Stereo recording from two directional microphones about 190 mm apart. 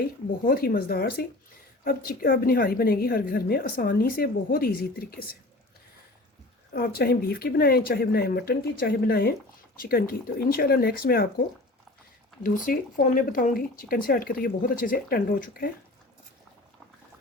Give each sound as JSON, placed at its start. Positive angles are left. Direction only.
{"t": 0.4, "sound": "a woman's voice", "side_deg": 50}
{"t": 6.7, "sound": "a woman's voice", "side_deg": 55}
{"t": 12.4, "sound": "a woman's voice", "side_deg": 45}